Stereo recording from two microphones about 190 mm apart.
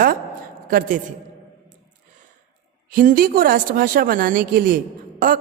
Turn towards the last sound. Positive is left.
turn(degrees=-45)  # may be behind; listen again after turning